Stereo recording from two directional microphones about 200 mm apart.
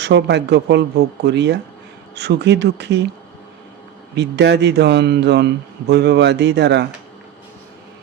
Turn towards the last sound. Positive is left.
turn(degrees=-60)  # may be behind; listen again after turning